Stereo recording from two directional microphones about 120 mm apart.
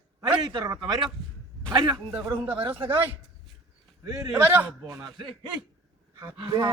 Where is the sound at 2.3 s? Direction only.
15° right (ahead or behind).